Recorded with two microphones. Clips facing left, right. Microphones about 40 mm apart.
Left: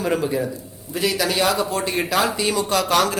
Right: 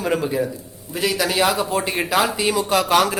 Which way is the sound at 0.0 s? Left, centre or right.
Centre.